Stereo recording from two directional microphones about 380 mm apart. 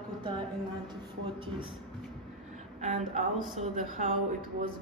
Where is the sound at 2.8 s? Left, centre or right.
Centre.